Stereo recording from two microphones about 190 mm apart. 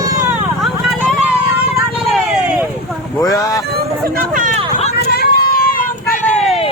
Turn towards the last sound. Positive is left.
turn(degrees=50)  # may be behind; listen again after turning